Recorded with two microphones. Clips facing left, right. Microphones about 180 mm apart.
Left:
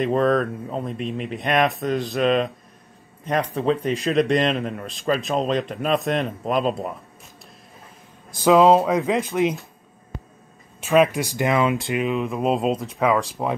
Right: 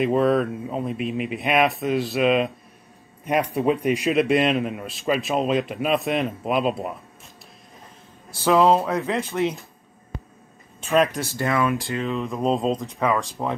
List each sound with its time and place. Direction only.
0.0 s a man's voice: 5° right (ahead or behind)
8.5 s speech: 15° left (ahead or behind)
10.8 s speech: 5° left (ahead or behind)